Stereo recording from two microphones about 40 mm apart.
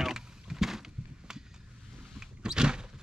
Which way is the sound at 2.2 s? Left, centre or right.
Centre.